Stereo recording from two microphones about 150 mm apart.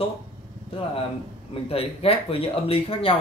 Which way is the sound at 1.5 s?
40° left (ahead or behind).